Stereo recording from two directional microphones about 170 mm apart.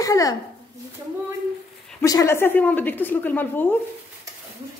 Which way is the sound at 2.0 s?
20° left (ahead or behind).